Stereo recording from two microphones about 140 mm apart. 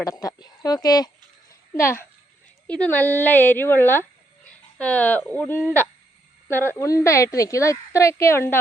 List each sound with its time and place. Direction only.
0.0 s a woman's voice: 25° left (ahead or behind)